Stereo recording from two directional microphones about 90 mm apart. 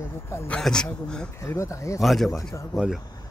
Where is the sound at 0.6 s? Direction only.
10° left (ahead or behind).